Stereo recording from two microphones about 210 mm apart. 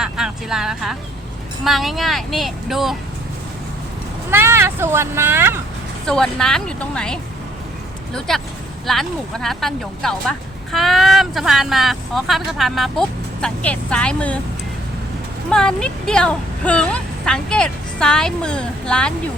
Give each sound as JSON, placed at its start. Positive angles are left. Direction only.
{"t": 0.0, "sound": "a sound", "side_deg": -5}
{"t": 1.6, "sound": "speech", "side_deg": 0}
{"t": 4.3, "sound": "speech", "side_deg": -10}
{"t": 6.1, "sound": "speech", "side_deg": 5}
{"t": 8.3, "sound": "speech", "side_deg": 0}
{"t": 15.4, "sound": "speech", "side_deg": 5}